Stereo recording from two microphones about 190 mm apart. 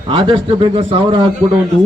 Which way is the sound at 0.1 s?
25° right (ahead or behind).